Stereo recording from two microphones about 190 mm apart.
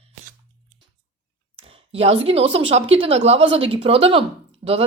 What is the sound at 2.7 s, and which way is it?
A woman's voice, 30° right (ahead or behind).